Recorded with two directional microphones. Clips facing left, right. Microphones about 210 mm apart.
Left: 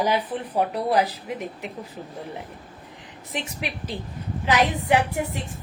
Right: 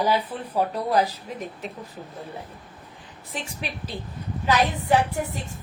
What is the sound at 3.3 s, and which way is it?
A woman's voice, 15° left (ahead or behind).